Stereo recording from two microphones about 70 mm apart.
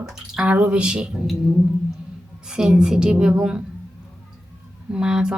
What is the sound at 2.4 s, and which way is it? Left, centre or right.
Speech, centre.